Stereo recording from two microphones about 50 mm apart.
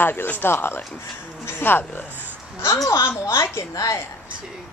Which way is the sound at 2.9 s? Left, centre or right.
Left.